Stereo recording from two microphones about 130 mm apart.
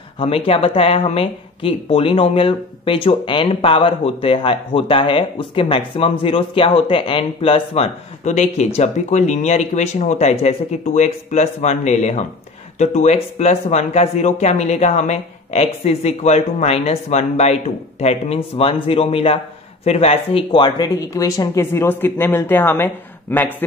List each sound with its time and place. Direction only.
0.5 s a man's voice: 50° left (ahead or behind); by 22.8 s 15° left (ahead or behind)